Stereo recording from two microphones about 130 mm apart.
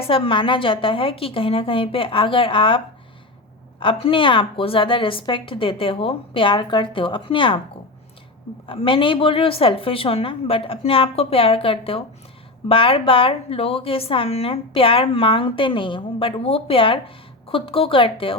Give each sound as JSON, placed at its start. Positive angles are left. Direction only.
{"t": 0.1, "sound": "a woman's voice", "side_deg": 40}
{"t": 8.6, "sound": "a woman's voice", "side_deg": 45}